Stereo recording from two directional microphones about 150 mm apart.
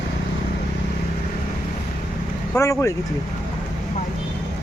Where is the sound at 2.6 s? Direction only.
20° left (ahead or behind).